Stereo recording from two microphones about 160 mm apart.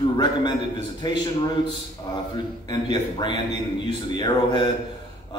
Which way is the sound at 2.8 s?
30° left (ahead or behind).